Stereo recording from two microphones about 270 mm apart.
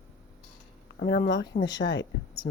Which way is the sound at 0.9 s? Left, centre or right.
Left.